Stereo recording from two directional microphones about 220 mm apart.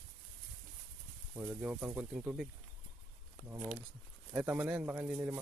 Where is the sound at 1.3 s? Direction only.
10° right (ahead or behind).